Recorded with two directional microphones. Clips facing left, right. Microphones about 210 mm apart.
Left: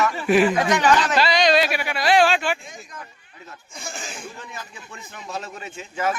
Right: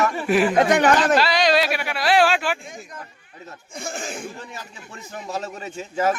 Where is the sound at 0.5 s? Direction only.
55° right (ahead or behind).